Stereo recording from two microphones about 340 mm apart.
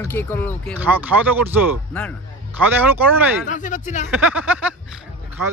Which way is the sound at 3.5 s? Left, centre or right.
Left.